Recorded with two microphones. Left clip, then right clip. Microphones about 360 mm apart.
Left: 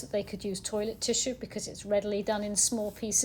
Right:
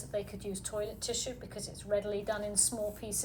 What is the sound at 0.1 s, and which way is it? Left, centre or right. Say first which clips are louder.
Speech: left 5 dB; centre.